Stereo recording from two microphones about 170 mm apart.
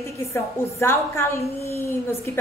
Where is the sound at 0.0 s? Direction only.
15° left (ahead or behind).